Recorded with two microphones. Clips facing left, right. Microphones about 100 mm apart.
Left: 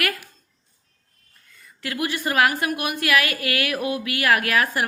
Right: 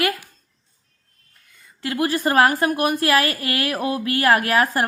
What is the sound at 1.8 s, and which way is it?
Speech, 30° right (ahead or behind).